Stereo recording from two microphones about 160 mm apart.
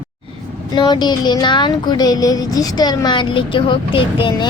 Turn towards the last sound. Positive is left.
turn(degrees=30)  # may be behind; listen again after turning